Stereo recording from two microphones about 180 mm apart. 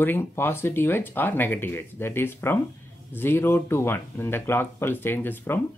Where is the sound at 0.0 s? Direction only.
10° left (ahead or behind).